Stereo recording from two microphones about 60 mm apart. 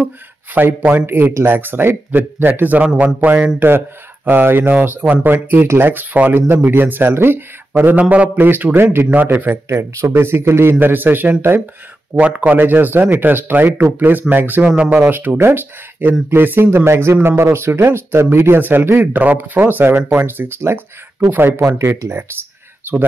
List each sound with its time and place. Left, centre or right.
0.6 s speech: right
8.0 s speech: right
8.4 s speech: right
9.7 s speech: right
12.2 s speech: right
18.6 s speech: right
21.5 s speech: right
22.9 s speech: right